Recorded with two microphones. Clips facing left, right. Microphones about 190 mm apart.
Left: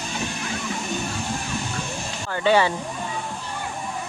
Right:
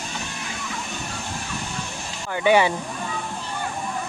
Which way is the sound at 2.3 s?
15° right (ahead or behind).